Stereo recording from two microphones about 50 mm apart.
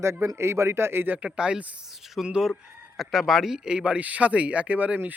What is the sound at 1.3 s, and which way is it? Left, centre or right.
Speech, centre.